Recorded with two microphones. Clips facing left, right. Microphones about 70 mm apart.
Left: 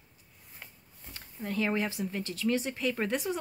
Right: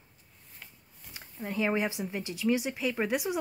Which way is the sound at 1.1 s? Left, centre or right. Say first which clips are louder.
Left 1 dB; centre.